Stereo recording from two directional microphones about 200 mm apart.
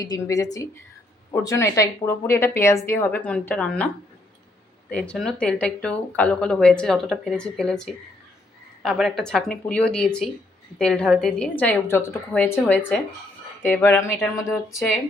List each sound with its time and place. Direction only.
0.0 s speech: 15° left (ahead or behind)
4.9 s speech: 5° left (ahead or behind)